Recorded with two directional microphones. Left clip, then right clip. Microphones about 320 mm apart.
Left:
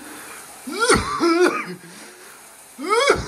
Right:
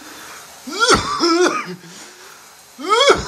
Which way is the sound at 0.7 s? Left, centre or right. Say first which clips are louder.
Right 3 dB; centre.